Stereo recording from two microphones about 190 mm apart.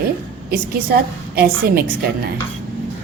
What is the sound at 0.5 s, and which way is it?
A woman's voice, 55° right (ahead or behind).